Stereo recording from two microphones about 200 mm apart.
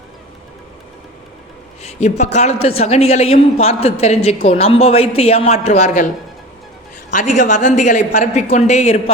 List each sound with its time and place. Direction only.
1.8 s a man's voice: 30° left (ahead or behind)
7.1 s a man's voice: 40° left (ahead or behind)